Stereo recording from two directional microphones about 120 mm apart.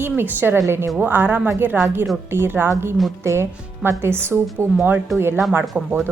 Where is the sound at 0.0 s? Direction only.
15° right (ahead or behind).